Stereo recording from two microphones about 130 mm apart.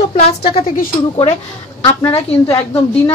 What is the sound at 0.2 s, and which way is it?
Speech, 50° left (ahead or behind).